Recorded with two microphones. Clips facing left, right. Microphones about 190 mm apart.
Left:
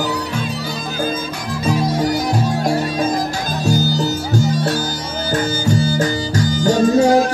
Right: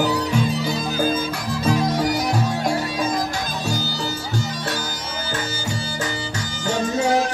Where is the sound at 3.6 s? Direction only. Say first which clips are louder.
Left 11 dB; 40° left (ahead or behind).